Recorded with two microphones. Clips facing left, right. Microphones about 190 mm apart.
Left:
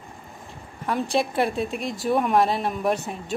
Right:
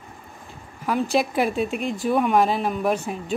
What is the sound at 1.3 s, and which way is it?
Speech, centre (ahead or behind).